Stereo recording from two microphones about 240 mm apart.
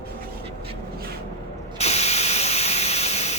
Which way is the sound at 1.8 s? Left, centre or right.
Left.